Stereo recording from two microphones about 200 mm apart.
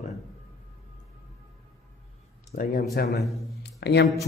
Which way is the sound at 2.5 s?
45° left (ahead or behind).